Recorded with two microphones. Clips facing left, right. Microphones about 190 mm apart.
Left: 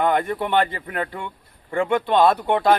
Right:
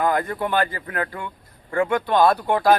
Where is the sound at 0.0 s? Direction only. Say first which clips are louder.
Left 1 dB; 25° left (ahead or behind).